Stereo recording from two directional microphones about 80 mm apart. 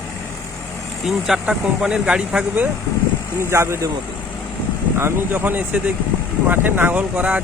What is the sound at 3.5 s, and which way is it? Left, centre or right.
Speech, right.